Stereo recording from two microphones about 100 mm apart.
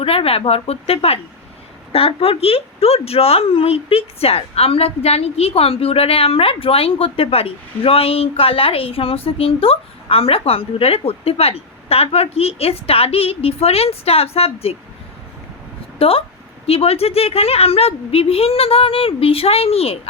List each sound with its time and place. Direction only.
0.0 s a woman's voice: 70° left (ahead or behind)
16.0 s speech: 70° left (ahead or behind)
16.6 s a woman's voice: 85° left